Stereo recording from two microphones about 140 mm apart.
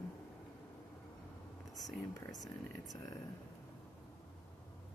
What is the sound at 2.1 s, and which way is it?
Speech, 25° left (ahead or behind).